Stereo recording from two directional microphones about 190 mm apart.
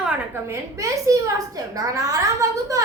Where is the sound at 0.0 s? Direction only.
10° right (ahead or behind).